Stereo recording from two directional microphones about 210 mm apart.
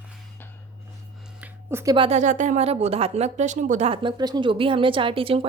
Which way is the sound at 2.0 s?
35° right (ahead or behind).